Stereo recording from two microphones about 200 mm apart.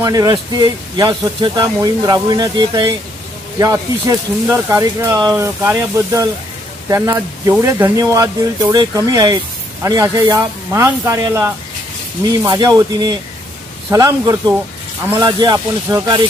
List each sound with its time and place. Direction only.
0.0 s speech: 20° right (ahead or behind)